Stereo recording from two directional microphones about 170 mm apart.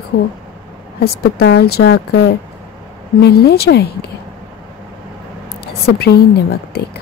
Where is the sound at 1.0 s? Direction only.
75° left (ahead or behind).